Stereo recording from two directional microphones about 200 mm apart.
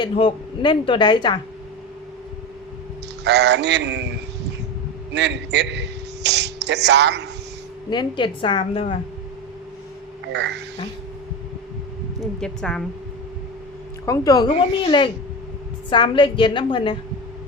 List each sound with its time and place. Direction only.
0.0 s a woman's voice: 25° left (ahead or behind)
3.2 s speech: 60° right (ahead or behind)
5.1 s speech: 60° right (ahead or behind)
7.9 s a woman's voice: 25° left (ahead or behind)
10.3 s speech: 60° right (ahead or behind)
12.4 s a woman's voice: 5° left (ahead or behind)
14.0 s a woman's voice: 15° left (ahead or behind)